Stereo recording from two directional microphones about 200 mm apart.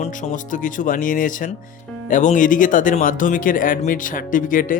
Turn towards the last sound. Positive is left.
turn(degrees=40)  # may be behind; listen again after turning